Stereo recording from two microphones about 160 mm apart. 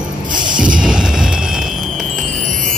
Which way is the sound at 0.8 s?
5° right (ahead or behind).